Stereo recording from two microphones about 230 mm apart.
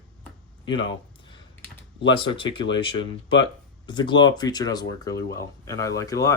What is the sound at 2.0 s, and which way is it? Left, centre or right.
Speech, left.